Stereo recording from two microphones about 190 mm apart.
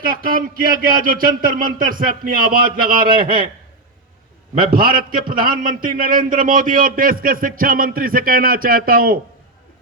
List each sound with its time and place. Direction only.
0.0 s a man's voice: 50° right (ahead or behind)
4.5 s a man's voice: 50° right (ahead or behind)